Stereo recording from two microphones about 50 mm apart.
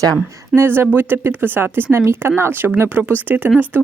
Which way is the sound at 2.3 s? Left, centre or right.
Right.